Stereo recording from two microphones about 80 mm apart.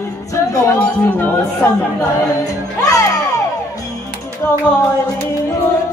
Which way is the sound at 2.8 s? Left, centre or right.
Left.